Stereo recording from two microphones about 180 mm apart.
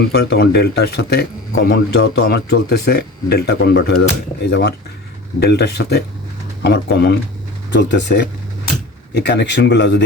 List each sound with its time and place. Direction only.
0.1 s speech: 65° left (ahead or behind)